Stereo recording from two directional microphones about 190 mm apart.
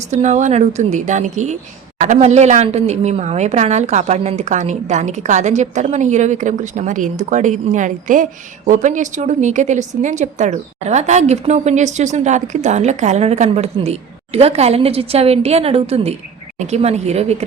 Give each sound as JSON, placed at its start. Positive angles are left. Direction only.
{"t": 0.1, "sound": "a woman's voice", "side_deg": -35}